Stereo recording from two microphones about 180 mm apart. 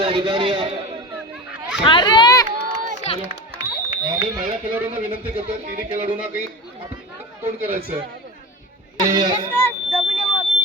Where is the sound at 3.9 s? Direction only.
25° right (ahead or behind).